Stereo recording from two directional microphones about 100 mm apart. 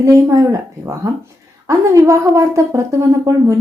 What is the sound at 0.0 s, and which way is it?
A woman's voice, 30° right (ahead or behind).